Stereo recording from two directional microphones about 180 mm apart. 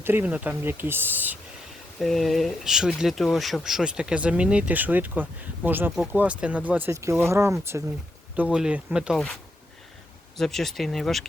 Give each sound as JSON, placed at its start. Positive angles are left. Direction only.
{"t": 0.0, "sound": "speech", "side_deg": -10}
{"t": 2.0, "sound": "speech", "side_deg": 0}
{"t": 10.3, "sound": "speech", "side_deg": 0}